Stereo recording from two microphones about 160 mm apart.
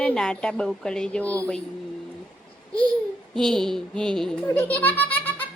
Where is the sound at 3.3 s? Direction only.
Centre (ahead or behind).